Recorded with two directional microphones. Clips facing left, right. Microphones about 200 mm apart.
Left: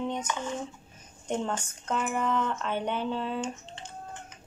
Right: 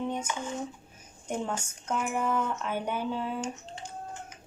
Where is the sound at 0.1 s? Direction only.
10° right (ahead or behind).